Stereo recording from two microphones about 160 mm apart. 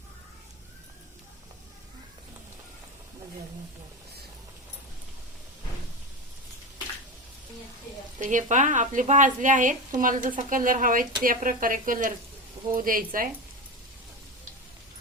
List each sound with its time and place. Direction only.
8.2 s a woman's voice: 50° right (ahead or behind)